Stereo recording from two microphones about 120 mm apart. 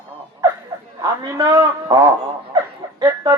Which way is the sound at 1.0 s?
30° right (ahead or behind).